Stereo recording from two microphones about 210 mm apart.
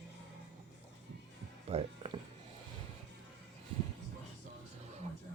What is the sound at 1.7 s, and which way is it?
Music, 30° right (ahead or behind).